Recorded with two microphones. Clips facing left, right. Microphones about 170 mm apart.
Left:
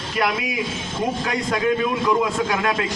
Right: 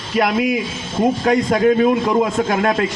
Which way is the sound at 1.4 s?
40° right (ahead or behind).